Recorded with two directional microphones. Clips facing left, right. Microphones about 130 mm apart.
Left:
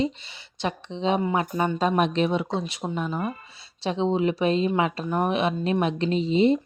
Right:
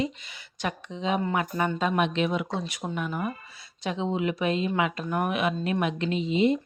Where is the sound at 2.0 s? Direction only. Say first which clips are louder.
Left 3 dB; 35° left (ahead or behind).